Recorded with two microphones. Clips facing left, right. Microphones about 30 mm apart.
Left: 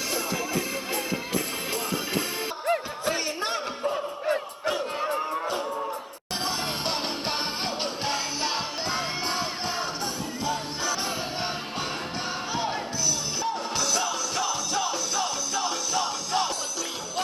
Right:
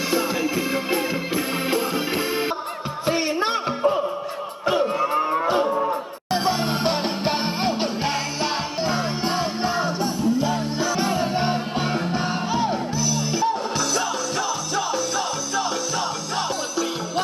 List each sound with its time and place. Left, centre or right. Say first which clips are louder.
3.1 s music: right 6 dB; right
4.7 s cattle: right 8 dB; right
6.3 s music: right 7 dB; centre
12.5 s music: right 5 dB; centre